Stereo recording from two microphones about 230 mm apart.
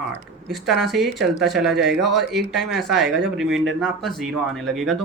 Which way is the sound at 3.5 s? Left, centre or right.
Right.